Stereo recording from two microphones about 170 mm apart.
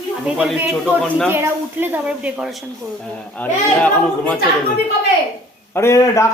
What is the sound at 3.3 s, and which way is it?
A man's voice, 10° left (ahead or behind).